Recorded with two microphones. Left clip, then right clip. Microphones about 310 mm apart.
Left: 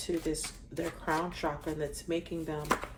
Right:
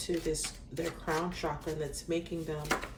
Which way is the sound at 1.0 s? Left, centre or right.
Left.